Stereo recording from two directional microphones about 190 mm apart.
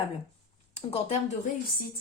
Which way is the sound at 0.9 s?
35° left (ahead or behind).